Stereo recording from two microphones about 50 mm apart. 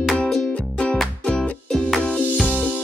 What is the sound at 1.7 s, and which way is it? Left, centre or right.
Music, centre.